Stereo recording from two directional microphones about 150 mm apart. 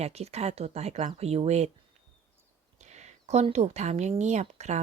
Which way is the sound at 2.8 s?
50° right (ahead or behind).